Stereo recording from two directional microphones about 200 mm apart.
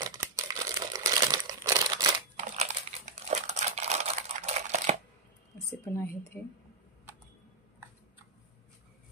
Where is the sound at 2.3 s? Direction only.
35° right (ahead or behind).